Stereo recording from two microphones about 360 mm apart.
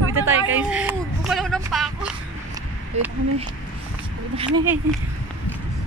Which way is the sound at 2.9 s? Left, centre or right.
Centre.